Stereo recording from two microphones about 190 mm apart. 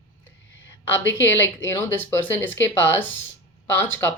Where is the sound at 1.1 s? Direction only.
10° left (ahead or behind).